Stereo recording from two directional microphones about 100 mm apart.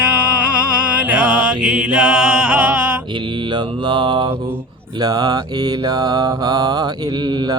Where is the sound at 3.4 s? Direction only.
50° right (ahead or behind).